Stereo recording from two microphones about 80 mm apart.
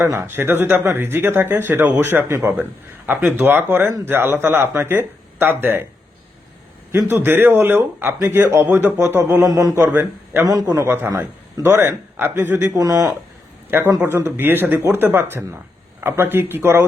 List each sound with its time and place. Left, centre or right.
0.0 s speech: right
6.9 s speech: right
9.5 s a man's voice: right
9.8 s speech: right
10.4 s a man's voice: right
10.8 s speech: right
12.7 s a man's voice: right
13.7 s a man's voice: right